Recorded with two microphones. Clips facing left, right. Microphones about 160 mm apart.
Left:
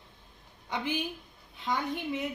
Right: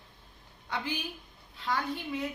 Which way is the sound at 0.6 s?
20° left (ahead or behind).